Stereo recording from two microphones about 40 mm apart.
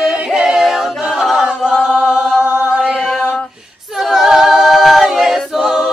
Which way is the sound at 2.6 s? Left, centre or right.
Right.